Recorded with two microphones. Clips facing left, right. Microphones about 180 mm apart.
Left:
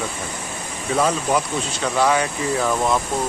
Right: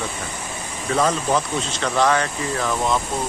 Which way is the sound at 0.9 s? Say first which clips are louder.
Even; 10° left (ahead or behind).